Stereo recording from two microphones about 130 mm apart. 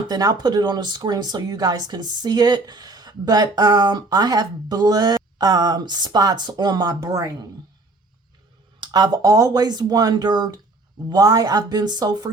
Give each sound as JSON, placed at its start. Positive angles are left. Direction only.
{"t": 0.1, "sound": "speech", "side_deg": -30}
{"t": 8.8, "sound": "speech", "side_deg": -30}